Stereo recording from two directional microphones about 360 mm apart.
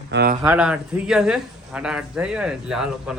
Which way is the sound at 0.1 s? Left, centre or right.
Right.